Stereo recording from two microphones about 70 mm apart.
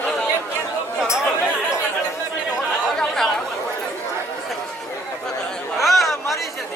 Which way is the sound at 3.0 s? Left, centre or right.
Centre.